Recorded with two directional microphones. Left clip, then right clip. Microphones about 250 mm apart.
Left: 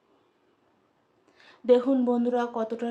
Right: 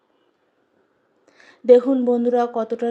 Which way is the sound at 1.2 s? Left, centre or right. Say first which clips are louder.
Right 8 dB; centre.